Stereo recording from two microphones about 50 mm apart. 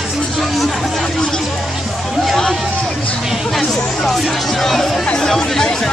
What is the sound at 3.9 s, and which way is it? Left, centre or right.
Music, centre.